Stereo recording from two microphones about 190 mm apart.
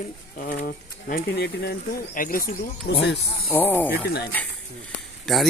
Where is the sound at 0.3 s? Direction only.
50° left (ahead or behind).